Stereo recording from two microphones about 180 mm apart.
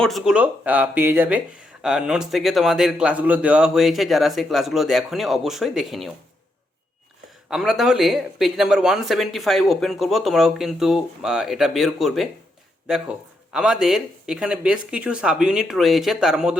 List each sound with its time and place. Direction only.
0.0 s speech: centre (ahead or behind)
7.5 s speech: centre (ahead or behind)